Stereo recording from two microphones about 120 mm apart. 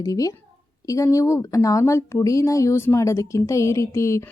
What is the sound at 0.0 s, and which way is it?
Speech, 30° left (ahead or behind).